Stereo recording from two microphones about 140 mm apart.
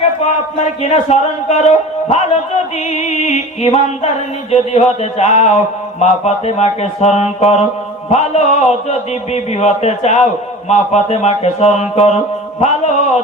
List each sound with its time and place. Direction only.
0.8 s speech: 50° left (ahead or behind)
3.0 s music: 55° left (ahead or behind)
4.5 s a man's voice: 50° left (ahead or behind)
12.6 s a sound: 50° left (ahead or behind)